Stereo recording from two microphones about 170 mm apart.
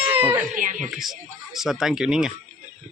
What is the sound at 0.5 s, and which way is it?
Speech, 50° right (ahead or behind).